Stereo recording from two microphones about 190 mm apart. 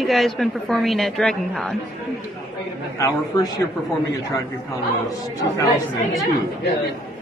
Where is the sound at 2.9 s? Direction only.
15° left (ahead or behind).